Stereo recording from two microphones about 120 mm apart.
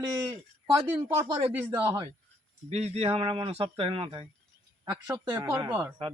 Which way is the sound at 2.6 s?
65° right (ahead or behind).